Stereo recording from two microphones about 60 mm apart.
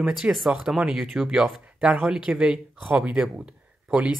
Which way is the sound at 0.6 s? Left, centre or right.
Centre.